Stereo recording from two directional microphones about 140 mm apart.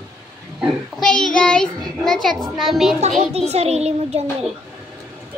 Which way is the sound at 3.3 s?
50° right (ahead or behind).